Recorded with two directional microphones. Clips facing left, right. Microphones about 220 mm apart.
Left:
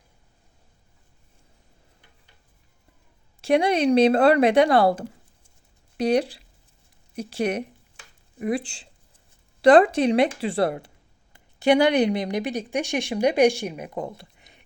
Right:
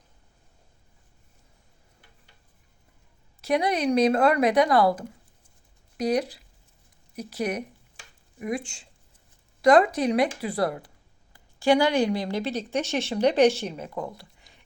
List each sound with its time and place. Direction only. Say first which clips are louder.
3.4 s a woman's voice: left 4 dB; 30° left (ahead or behind)